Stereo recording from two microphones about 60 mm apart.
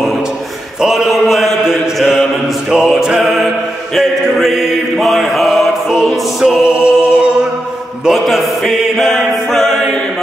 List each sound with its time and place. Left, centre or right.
0.8 s mantra: centre
2.7 s music: centre
3.9 s chant: centre
5.0 s mantra: centre
6.4 s music: centre
8.0 s music: centre